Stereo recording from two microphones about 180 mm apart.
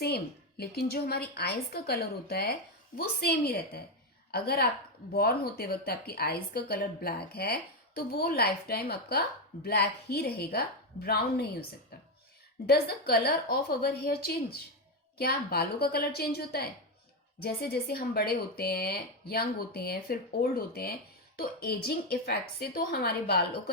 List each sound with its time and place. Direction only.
0.0 s a woman's voice: 60° left (ahead or behind)
12.6 s speech: 60° left (ahead or behind)